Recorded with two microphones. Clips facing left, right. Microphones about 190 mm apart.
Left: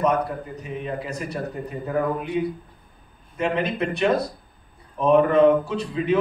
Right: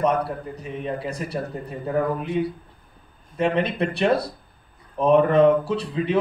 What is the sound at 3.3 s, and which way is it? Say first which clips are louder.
A man's voice: right 2 dB; 35° right (ahead or behind).